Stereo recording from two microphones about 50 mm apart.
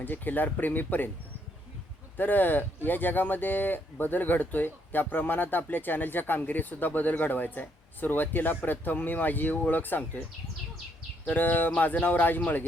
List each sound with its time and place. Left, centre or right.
0.0 s speech: left
2.1 s speech: left
11.3 s speech: left